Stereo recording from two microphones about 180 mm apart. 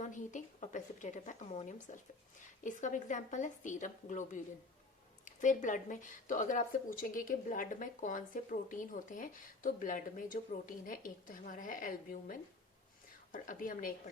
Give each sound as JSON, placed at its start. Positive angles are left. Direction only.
{"t": 0.0, "sound": "speech", "side_deg": 45}